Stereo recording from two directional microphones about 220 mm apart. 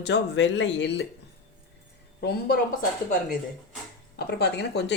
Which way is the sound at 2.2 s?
45° left (ahead or behind).